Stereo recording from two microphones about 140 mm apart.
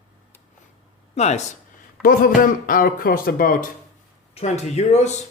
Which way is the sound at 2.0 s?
90° left.